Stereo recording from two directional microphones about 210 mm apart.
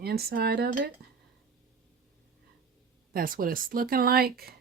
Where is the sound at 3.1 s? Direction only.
40° right (ahead or behind).